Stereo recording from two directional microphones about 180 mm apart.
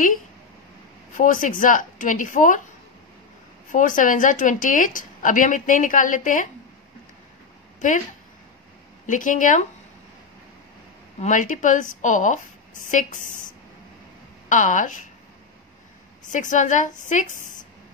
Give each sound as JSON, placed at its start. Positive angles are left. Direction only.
{"t": 1.1, "sound": "a woman's voice", "side_deg": 45}
{"t": 3.7, "sound": "a woman's voice", "side_deg": 45}
{"t": 9.0, "sound": "a woman's voice", "side_deg": 45}
{"t": 11.1, "sound": "a woman's voice", "side_deg": 45}
{"t": 14.5, "sound": "a woman's voice", "side_deg": 45}
{"t": 16.3, "sound": "a woman's voice", "side_deg": 45}